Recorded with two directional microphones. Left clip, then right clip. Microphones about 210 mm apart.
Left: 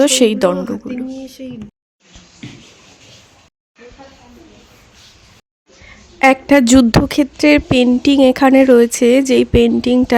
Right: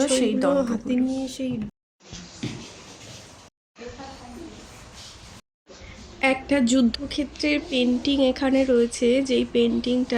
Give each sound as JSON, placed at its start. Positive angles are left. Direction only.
{"t": 0.0, "sound": "a woman's voice", "side_deg": 50}
{"t": 1.4, "sound": "speech", "side_deg": 0}
{"t": 6.1, "sound": "a woman's voice", "side_deg": 50}